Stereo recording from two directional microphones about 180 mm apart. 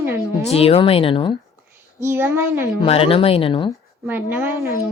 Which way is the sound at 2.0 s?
15° right (ahead or behind).